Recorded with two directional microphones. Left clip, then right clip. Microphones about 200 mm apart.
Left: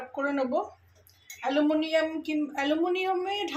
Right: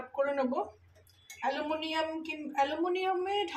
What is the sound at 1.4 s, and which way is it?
A woman's voice, 20° left (ahead or behind).